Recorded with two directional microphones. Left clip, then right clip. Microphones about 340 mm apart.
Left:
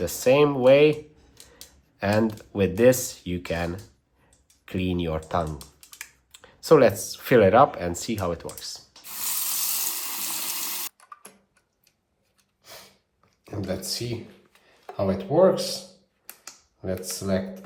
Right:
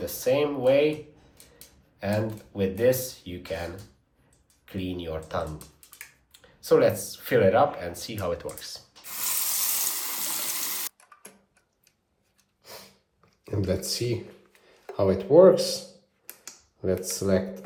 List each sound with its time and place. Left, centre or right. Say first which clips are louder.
0.0 s speech: left 5 dB; left
2.0 s speech: left 5 dB; left
9.0 s water: even; centre
13.4 s speech: right 3 dB; centre
16.2 s computer keyboard: left 1 dB; centre
17.1 s speech: right 2 dB; centre